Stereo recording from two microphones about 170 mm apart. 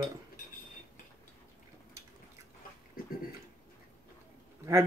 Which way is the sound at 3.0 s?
60° left (ahead or behind).